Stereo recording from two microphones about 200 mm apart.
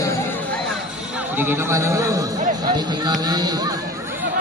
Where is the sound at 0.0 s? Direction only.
15° left (ahead or behind).